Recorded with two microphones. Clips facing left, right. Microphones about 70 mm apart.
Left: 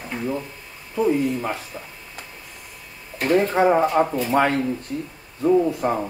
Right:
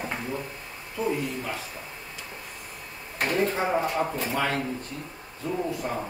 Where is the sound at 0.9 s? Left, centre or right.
Left.